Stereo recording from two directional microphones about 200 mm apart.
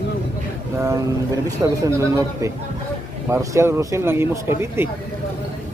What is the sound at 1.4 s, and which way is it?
A man's voice, 15° right (ahead or behind).